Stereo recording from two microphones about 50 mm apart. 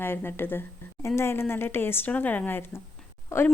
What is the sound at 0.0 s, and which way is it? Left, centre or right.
Speech, left.